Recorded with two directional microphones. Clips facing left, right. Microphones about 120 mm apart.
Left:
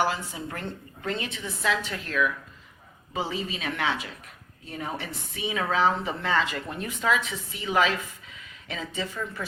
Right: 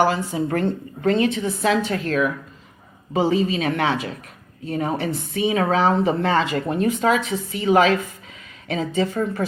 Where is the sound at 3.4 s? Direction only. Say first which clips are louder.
Right 12 dB; 65° right (ahead or behind).